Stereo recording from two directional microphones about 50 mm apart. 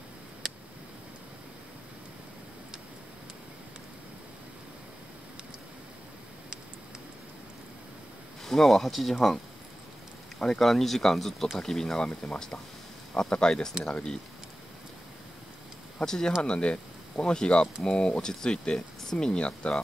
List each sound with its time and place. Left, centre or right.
0.4 s a sound: centre
8.5 s speech: centre
10.4 s speech: centre
16.1 s speech: centre